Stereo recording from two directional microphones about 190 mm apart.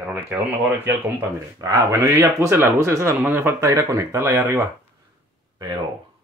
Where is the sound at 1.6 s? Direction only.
15° right (ahead or behind).